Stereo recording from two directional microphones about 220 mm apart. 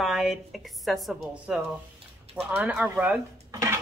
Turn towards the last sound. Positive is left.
turn(degrees=-10)  # may be behind; listen again after turning